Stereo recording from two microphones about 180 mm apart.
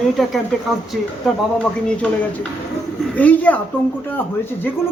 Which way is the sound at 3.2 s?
10° left (ahead or behind).